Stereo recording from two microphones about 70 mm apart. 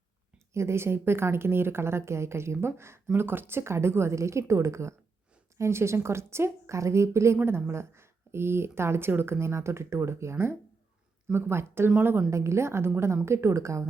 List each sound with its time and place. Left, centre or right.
0.5 s a woman's voice: right